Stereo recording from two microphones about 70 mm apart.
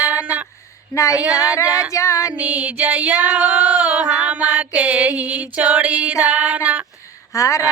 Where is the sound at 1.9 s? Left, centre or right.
Left.